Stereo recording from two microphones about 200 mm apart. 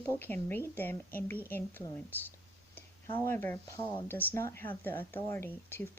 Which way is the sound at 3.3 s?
10° left (ahead or behind).